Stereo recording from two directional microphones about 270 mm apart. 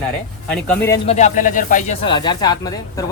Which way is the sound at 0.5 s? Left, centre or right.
Centre.